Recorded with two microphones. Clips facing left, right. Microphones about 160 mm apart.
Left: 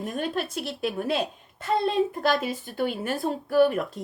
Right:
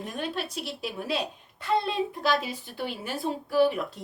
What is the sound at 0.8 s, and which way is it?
Speech, 55° left (ahead or behind).